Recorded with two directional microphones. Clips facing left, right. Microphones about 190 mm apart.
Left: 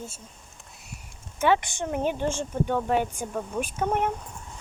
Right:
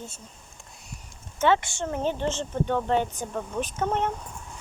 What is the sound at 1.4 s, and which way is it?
Speech, 15° left (ahead or behind).